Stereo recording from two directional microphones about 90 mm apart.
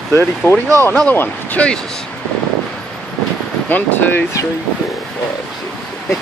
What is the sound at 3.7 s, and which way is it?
Speech, 20° left (ahead or behind).